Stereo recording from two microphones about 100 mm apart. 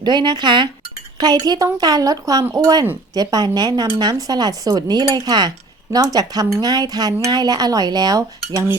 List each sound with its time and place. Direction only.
0.0 s speech: 45° right (ahead or behind)
1.2 s dishes: 45° right (ahead or behind)
3.2 s speech: 40° right (ahead or behind)
6.1 s dishes: 40° right (ahead or behind)